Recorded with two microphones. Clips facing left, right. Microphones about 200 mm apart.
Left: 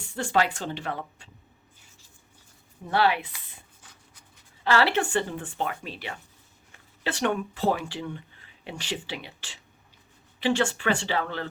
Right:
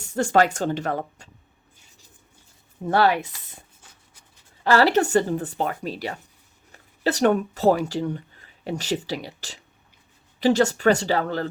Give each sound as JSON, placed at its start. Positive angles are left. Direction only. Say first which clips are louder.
{"t": 0.0, "sound": "speech", "louder": "right 6 dB", "side_deg": -45}
{"t": 2.8, "sound": "speech", "louder": "right 4 dB", "side_deg": -45}
{"t": 4.6, "sound": "speech", "louder": "right 5 dB", "side_deg": -40}